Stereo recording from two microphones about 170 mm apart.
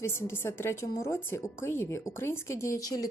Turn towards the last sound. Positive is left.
turn(degrees=20)  # may be behind; listen again after turning